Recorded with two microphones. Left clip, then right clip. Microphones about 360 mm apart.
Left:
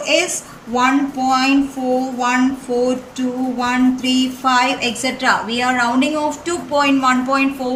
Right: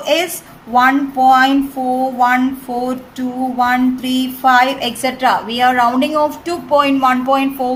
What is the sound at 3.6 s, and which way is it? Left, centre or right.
A woman's voice, centre.